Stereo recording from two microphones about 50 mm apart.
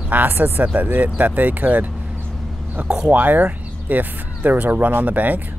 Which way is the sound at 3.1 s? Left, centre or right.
Right.